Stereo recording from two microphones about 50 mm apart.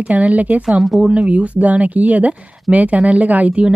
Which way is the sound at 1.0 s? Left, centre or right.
Centre.